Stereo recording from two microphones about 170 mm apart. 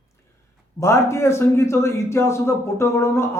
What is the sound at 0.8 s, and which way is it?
A man's voice, 15° left (ahead or behind).